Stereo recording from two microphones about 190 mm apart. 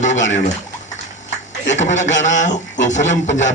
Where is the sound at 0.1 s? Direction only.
75° left (ahead or behind).